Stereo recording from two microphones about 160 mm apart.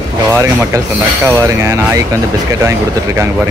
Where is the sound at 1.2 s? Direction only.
20° right (ahead or behind).